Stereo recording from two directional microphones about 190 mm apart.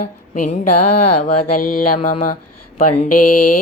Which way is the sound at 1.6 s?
45° left (ahead or behind).